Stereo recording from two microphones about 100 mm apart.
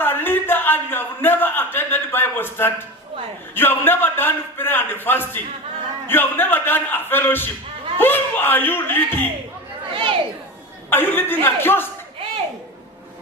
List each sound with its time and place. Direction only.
0.0 s a sound: 20° left (ahead or behind)
3.5 s a man's voice: 20° left (ahead or behind)
9.9 s chatter: 60° right (ahead or behind)
10.8 s speech: 20° left (ahead or behind)